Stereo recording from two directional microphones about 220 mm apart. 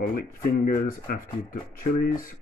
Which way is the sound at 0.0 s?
40° left (ahead or behind).